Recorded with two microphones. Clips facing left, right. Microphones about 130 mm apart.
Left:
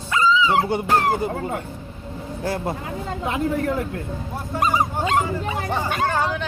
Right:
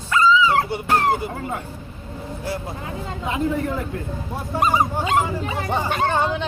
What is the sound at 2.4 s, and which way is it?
Speech, 50° left (ahead or behind).